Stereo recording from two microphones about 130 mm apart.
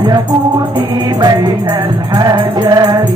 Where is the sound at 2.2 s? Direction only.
30° right (ahead or behind).